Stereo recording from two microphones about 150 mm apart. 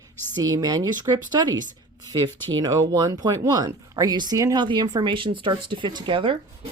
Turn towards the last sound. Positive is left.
turn(degrees=-35)  # may be behind; listen again after turning